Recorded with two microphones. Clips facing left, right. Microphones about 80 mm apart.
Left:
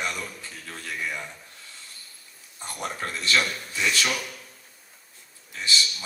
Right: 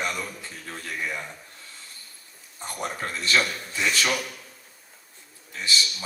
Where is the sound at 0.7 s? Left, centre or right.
Right.